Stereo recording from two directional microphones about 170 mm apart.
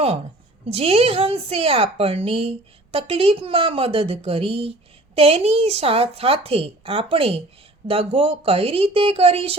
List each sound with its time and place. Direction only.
0.6 s a woman's voice: 35° right (ahead or behind)